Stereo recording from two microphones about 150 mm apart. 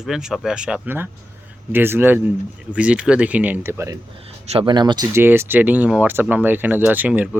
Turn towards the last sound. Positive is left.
turn(degrees=-10)  # may be behind; listen again after turning